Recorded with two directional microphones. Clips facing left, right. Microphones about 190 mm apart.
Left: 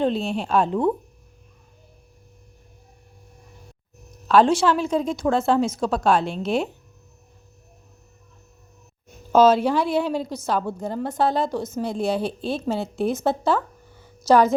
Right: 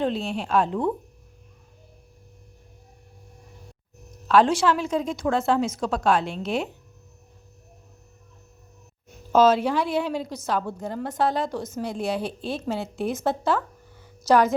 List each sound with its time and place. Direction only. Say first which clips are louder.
0.0 s a woman's voice: left 3 dB; 25° left (ahead or behind)
4.3 s a woman's voice: left 2 dB; 30° left (ahead or behind)
9.3 s a woman's voice: left 2 dB; 30° left (ahead or behind)